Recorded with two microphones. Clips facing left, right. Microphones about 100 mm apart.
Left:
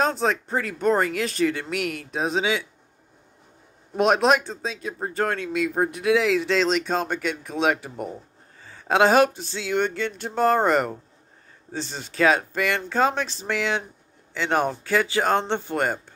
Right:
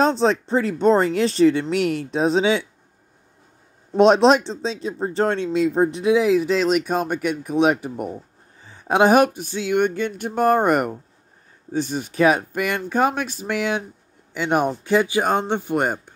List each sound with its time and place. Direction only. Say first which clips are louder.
0.0 s speech: right 5 dB; 30° right (ahead or behind)
3.9 s speech: right 5 dB; 30° right (ahead or behind)